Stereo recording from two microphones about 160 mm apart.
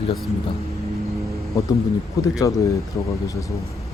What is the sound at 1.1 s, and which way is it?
Music, 20° right (ahead or behind).